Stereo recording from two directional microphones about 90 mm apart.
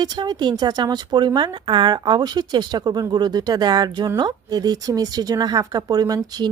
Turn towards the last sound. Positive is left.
turn(degrees=-50)  # may be behind; listen again after turning